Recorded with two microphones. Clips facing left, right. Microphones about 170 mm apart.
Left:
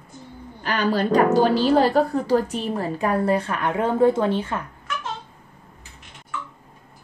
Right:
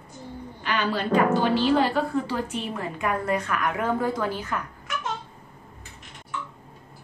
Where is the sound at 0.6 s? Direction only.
40° left (ahead or behind).